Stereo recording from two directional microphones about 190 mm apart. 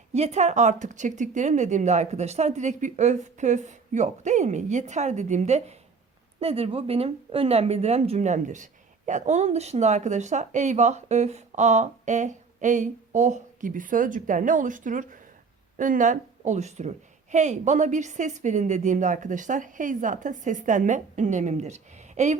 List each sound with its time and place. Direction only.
0.1 s speech: 35° right (ahead or behind)